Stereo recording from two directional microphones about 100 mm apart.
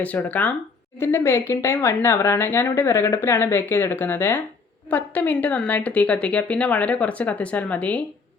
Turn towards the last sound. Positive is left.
turn(degrees=15)  # may be behind; listen again after turning